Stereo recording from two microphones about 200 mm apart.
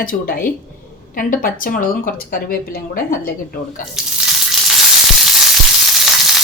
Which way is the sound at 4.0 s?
Centre (ahead or behind).